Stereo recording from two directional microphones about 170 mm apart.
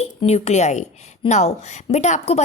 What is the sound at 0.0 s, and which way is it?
A woman's voice, 40° left (ahead or behind).